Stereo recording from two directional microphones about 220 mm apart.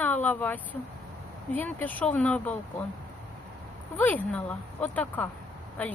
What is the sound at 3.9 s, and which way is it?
Speech, 5° left (ahead or behind).